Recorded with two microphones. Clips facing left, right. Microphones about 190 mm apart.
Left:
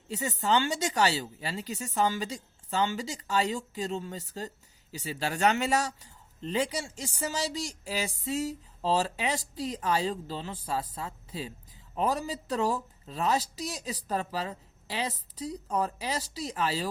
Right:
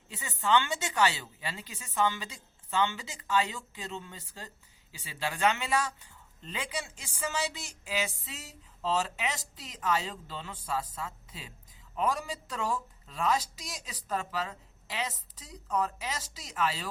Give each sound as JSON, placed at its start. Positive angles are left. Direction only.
{"t": 0.1, "sound": "speech", "side_deg": 40}